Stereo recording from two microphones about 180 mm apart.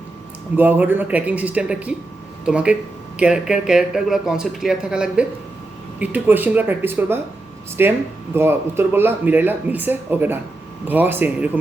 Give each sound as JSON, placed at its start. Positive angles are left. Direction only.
{"t": 0.5, "sound": "speech", "side_deg": -10}